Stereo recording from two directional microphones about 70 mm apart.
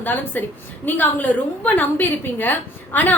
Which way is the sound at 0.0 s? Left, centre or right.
Left.